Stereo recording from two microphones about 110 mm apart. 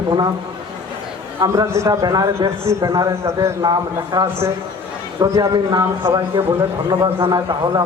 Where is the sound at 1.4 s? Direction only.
30° right (ahead or behind).